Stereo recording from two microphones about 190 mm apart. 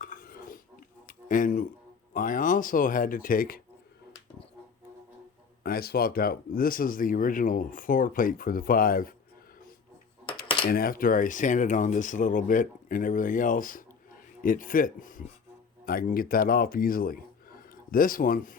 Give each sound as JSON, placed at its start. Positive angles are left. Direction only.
{"t": 0.0, "sound": "dishes", "side_deg": 45}
{"t": 2.1, "sound": "speech", "side_deg": 45}
{"t": 5.6, "sound": "speech", "side_deg": 55}
{"t": 10.7, "sound": "speech", "side_deg": 50}